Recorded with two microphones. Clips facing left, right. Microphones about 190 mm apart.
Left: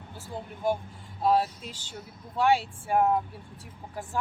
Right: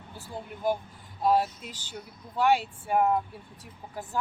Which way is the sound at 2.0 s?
Centre (ahead or behind).